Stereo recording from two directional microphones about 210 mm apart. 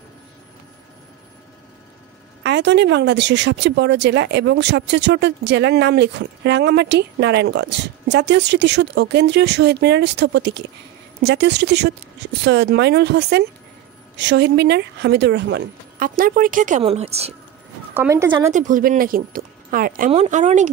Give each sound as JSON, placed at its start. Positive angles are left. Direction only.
{"t": 2.4, "sound": "speech", "side_deg": -55}
{"t": 16.0, "sound": "speech", "side_deg": -40}
{"t": 17.9, "sound": "a woman's voice", "side_deg": -10}
{"t": 18.5, "sound": "speech", "side_deg": -35}